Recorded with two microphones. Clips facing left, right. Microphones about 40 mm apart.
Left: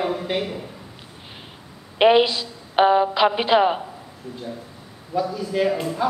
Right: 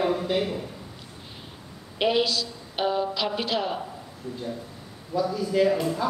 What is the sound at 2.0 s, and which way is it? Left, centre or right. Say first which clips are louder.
A woman's voice: left 8 dB; left.